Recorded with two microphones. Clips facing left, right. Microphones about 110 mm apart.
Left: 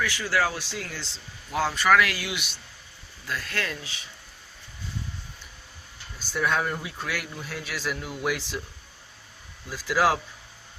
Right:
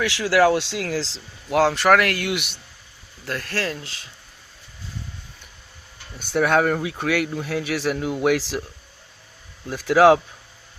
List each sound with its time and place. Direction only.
0.0 s speech: 80° right; by 3.5 s 55° right (ahead or behind)
3.5 s speech: 35° right (ahead or behind)
6.1 s speech: 65° right (ahead or behind)
9.6 s speech: 60° right (ahead or behind)